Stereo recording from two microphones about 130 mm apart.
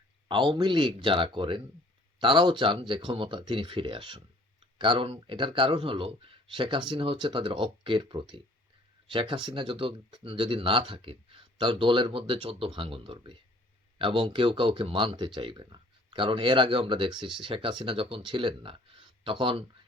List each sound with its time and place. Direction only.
0.3 s speech: 35° right (ahead or behind)